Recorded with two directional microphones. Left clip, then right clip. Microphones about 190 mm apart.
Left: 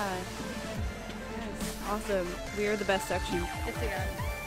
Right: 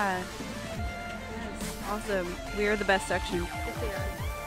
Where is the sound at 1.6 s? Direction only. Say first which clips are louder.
Left 1 dB; centre (ahead or behind).